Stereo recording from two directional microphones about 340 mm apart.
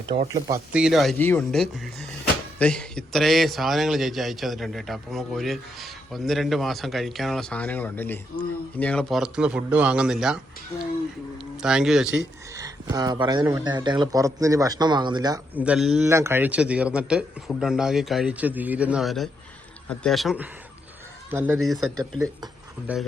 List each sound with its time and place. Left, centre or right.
0.1 s speech: centre
11.6 s speech: centre